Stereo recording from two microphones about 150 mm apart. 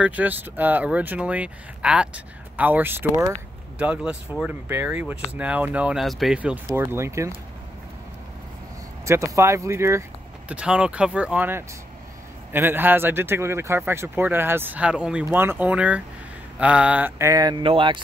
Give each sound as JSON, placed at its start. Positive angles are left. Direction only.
{"t": 0.0, "sound": "speech", "side_deg": -10}
{"t": 9.0, "sound": "speech", "side_deg": -20}
{"t": 10.5, "sound": "speech", "side_deg": -5}